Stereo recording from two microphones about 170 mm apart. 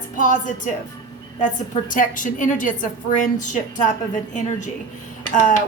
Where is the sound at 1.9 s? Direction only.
50° left (ahead or behind).